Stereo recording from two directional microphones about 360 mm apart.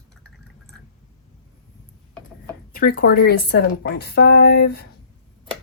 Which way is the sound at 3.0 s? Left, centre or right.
Left.